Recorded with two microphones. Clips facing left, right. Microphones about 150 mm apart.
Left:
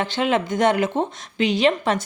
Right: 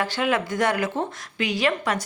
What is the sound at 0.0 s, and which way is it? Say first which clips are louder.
A woman's voice: left 2 dB; 25° left (ahead or behind).